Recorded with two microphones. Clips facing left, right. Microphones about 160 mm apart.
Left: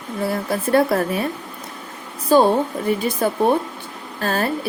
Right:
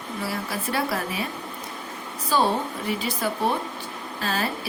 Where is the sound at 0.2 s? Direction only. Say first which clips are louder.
Left 8 dB; 55° left (ahead or behind).